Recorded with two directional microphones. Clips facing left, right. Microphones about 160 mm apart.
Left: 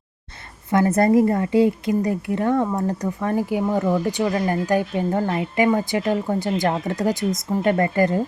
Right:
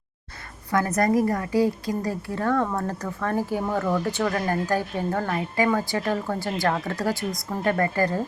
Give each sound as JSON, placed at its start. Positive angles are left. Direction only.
{"t": 0.7, "sound": "speech", "side_deg": 25}